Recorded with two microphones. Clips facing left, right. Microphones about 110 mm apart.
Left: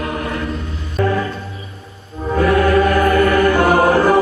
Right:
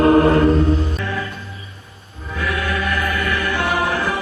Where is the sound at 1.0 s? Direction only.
40° left (ahead or behind).